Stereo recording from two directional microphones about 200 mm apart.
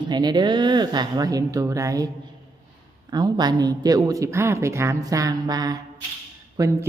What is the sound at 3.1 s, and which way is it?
Speech, 20° right (ahead or behind).